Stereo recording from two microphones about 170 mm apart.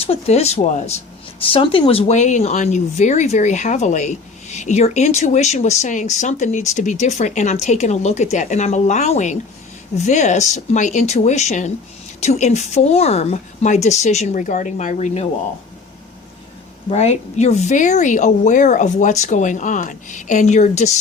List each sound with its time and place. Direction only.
0.0 s speech: 35° left (ahead or behind)
16.9 s speech: 40° left (ahead or behind)